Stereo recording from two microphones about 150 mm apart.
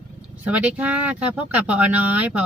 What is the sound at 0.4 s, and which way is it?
Speech, 10° right (ahead or behind).